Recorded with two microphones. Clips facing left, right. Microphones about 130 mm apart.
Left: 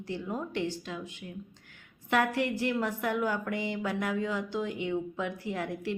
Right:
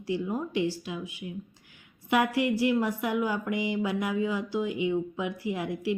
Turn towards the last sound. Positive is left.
turn(degrees=-10)  # may be behind; listen again after turning